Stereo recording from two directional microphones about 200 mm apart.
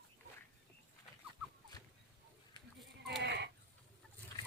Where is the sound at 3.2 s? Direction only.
60° right (ahead or behind).